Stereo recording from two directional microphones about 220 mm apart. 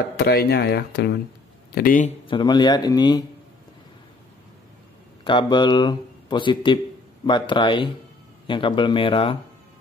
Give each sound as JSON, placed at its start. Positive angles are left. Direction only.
{"t": 0.2, "sound": "speech", "side_deg": 45}
{"t": 2.2, "sound": "a man's voice", "side_deg": 20}
{"t": 5.2, "sound": "a man's voice", "side_deg": 20}